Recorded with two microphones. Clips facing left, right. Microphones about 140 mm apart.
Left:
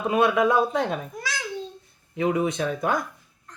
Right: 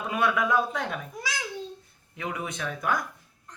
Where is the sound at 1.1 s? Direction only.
15° right (ahead or behind).